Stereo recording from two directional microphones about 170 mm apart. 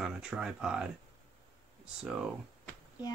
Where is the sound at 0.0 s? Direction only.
5° right (ahead or behind).